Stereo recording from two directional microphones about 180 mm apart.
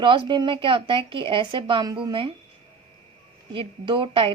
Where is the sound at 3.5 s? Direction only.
30° right (ahead or behind).